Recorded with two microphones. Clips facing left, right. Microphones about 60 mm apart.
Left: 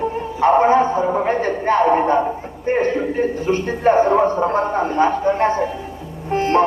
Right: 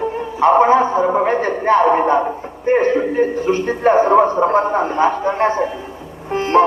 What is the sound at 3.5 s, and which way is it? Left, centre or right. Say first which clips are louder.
A man's voice: right 1 dB; right.